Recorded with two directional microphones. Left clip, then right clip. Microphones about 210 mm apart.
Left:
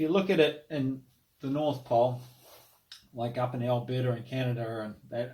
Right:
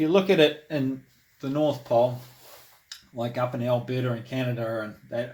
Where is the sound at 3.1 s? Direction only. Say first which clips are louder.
Right 4 dB; 40° right (ahead or behind).